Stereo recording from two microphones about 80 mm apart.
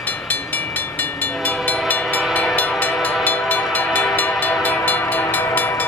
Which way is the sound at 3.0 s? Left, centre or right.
Left.